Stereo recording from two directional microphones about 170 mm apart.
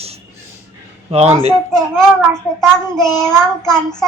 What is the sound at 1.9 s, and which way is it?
Child singing, 5° left (ahead or behind).